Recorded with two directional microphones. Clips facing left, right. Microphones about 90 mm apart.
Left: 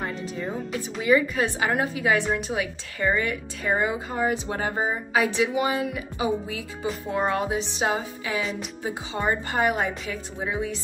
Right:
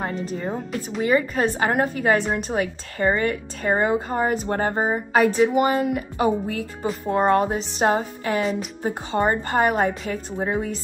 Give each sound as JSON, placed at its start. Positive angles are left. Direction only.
{"t": 1.0, "sound": "speech", "side_deg": -40}